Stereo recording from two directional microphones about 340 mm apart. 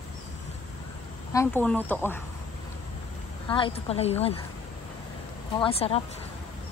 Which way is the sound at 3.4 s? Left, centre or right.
Centre.